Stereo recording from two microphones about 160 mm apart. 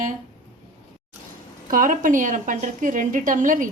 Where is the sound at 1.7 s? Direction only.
55° right (ahead or behind).